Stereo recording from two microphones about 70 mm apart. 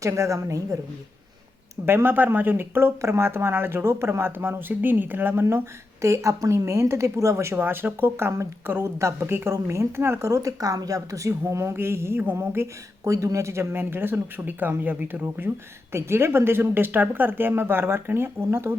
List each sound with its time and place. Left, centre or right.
0.0 s a woman's voice: right
1.7 s speech: right
7.5 s speech: right
13.1 s speech: right